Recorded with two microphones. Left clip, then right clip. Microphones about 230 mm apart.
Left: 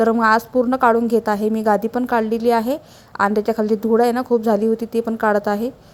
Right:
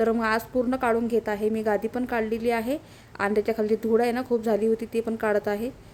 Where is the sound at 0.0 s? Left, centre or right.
Centre.